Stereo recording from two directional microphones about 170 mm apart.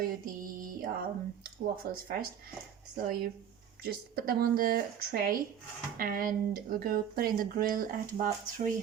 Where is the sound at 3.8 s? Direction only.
60° right (ahead or behind).